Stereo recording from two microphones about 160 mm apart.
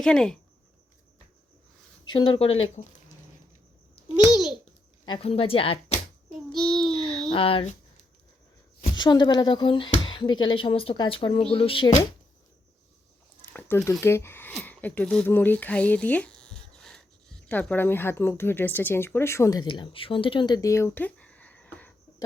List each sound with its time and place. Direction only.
0.0 s speech: 5° left (ahead or behind)
2.0 s speech: 30° left (ahead or behind)
4.3 s babbling: centre (ahead or behind)
5.0 s speech: 35° left (ahead or behind)
6.5 s babbling: 5° left (ahead or behind)
6.9 s a sound: 35° left (ahead or behind)
7.3 s speech: 35° left (ahead or behind)
9.0 s speech: 25° left (ahead or behind)
13.5 s a sound: 10° left (ahead or behind)
14.0 s speech: 15° left (ahead or behind)